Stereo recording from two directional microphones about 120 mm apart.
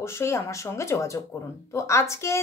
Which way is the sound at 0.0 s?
20° left (ahead or behind).